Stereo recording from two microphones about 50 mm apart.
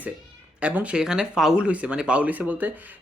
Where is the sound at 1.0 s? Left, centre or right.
Centre.